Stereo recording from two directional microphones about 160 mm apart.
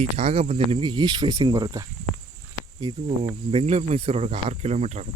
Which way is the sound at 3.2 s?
40° right (ahead or behind).